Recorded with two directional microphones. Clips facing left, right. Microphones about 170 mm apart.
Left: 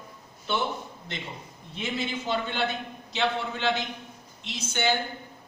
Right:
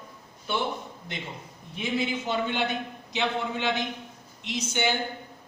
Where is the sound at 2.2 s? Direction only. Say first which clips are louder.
Right 1 dB; 15° right (ahead or behind).